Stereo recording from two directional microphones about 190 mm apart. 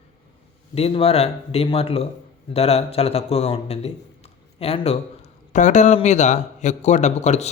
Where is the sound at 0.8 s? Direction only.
30° left (ahead or behind).